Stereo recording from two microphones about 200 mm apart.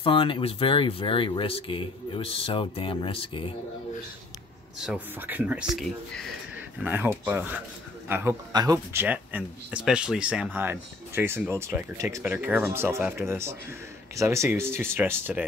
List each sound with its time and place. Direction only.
0.0 s speech: 25° left (ahead or behind)
4.7 s speech: 5° right (ahead or behind)